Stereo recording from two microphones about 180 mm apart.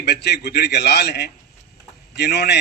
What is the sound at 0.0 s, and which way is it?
A man's voice, 65° left (ahead or behind).